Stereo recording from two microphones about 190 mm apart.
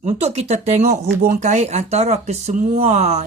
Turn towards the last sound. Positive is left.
turn(degrees=-35)  # may be behind; listen again after turning